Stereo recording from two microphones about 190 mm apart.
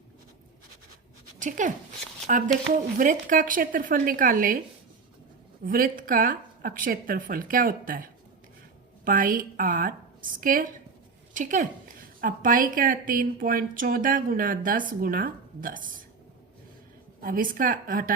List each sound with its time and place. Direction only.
1.4 s speech: 40° right (ahead or behind)
3.0 s a woman's voice: 45° right (ahead or behind)
5.6 s a woman's voice: 45° right (ahead or behind)
17.2 s a woman's voice: 50° right (ahead or behind)